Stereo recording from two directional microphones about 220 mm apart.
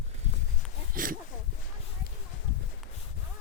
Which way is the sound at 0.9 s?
40° right (ahead or behind).